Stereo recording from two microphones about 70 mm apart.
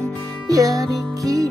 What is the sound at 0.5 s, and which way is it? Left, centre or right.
Music, right.